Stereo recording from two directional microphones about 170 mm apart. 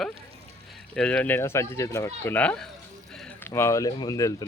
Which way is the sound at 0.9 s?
5° left (ahead or behind).